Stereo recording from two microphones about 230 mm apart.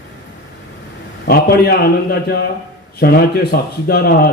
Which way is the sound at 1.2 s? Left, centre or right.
Left.